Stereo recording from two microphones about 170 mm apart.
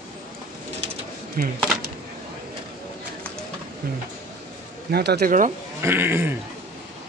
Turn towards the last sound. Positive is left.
turn(degrees=-15)  # may be behind; listen again after turning